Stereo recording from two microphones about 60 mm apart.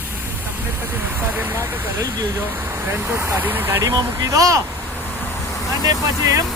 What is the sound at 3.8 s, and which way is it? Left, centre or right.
Speech, right.